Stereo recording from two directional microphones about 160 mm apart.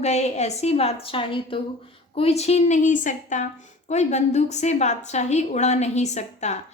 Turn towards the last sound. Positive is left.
turn(degrees=45)  # may be behind; listen again after turning